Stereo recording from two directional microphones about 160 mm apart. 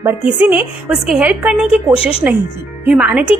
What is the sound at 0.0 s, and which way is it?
A woman's voice, 10° right (ahead or behind).